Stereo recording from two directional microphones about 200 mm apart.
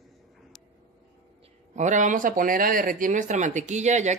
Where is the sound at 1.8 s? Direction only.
40° right (ahead or behind).